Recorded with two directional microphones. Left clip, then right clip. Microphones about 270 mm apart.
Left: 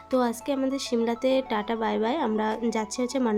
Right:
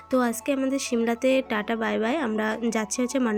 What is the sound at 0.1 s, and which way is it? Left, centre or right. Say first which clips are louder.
Speech: right 1 dB; centre.